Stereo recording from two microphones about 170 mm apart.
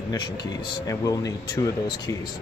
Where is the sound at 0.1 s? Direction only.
20° left (ahead or behind).